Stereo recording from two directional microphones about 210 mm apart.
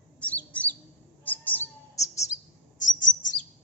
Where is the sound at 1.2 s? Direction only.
10° left (ahead or behind).